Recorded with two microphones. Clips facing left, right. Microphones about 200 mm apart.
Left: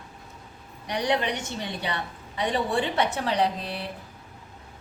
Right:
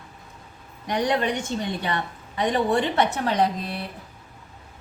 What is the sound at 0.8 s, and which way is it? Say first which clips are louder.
A woman's voice: right 3 dB; 50° right (ahead or behind).